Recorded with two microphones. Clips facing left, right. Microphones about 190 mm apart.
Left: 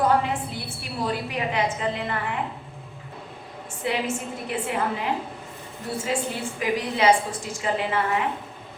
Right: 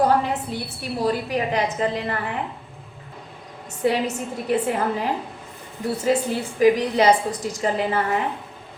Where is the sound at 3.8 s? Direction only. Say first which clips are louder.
Right 6 dB; 40° right (ahead or behind).